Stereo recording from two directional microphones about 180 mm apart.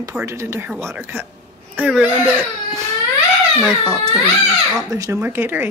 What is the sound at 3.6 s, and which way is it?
Speech, 5° left (ahead or behind).